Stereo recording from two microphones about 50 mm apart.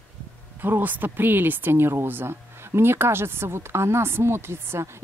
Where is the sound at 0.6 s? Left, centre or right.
Right.